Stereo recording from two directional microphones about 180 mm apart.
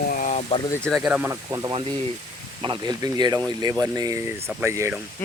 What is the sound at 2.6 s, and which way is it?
Speech, 25° right (ahead or behind).